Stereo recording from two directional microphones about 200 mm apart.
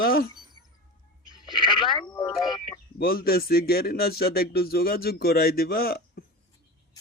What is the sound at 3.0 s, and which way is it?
Speech, 50° left (ahead or behind).